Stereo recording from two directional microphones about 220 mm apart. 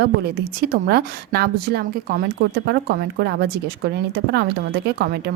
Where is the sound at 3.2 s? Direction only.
50° right (ahead or behind).